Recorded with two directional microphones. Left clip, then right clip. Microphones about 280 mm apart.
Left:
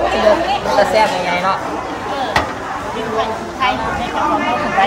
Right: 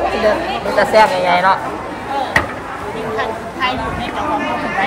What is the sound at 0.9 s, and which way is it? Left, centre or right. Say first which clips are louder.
Speech: right 3 dB; centre.